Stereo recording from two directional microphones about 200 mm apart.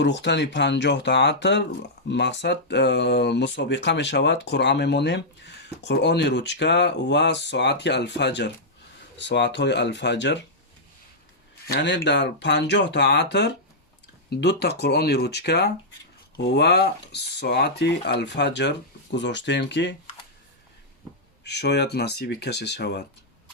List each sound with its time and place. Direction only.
0.0 s speech: 60° left (ahead or behind)
11.7 s speech: 55° left (ahead or behind)
21.4 s speech: 55° left (ahead or behind)